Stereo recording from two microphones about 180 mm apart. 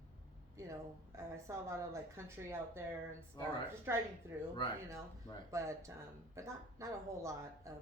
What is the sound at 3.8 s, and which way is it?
Speech, 15° right (ahead or behind).